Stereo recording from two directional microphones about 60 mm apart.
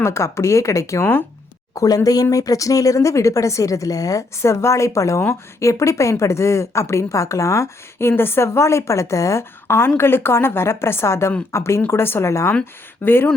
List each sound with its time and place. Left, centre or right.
0.0 s speech: left
1.7 s speech: left
4.4 s speech: left
9.4 s a woman's voice: left
13.0 s speech: left